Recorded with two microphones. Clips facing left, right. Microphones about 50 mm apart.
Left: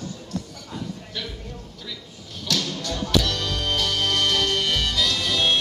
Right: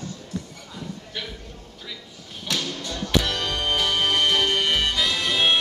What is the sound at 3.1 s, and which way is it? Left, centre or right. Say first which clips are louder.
Music: right 1 dB; right.